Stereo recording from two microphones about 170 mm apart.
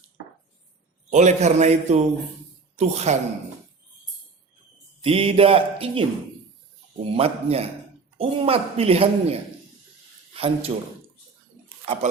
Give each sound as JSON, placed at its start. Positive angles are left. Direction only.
{"t": 1.1, "sound": "a man's voice", "side_deg": -45}
{"t": 5.0, "sound": "speech", "side_deg": -35}